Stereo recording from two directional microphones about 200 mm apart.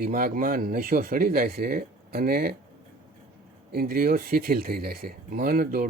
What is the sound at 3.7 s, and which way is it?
Speech, 50° right (ahead or behind).